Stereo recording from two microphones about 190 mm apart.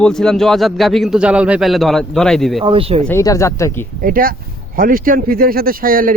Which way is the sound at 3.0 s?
15° left (ahead or behind).